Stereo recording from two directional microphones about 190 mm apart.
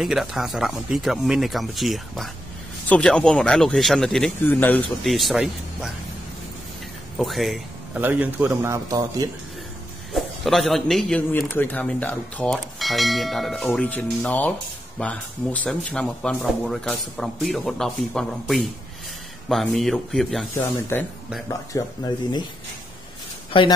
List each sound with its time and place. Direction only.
0.0 s speech: centre (ahead or behind)
7.2 s a man's voice: centre (ahead or behind); by 9.3 s 15° right (ahead or behind)
10.1 s speech: centre (ahead or behind)
21.5 s speech: 20° left (ahead or behind)